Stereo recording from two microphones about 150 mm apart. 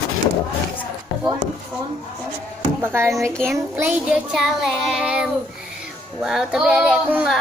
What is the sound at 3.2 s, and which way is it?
Child singing, 15° right (ahead or behind).